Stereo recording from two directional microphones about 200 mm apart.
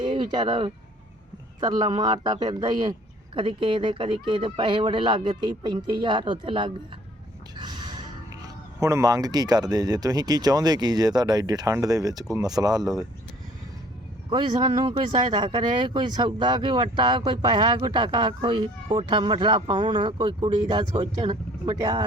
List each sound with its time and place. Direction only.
0.0 s speech: 25° right (ahead or behind)
14.3 s speech: 20° right (ahead or behind)